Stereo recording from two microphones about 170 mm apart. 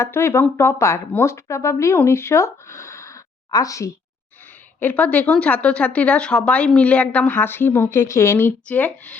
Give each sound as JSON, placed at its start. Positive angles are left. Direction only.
{"t": 0.0, "sound": "speech", "side_deg": 15}
{"t": 4.8, "sound": "speech", "side_deg": 10}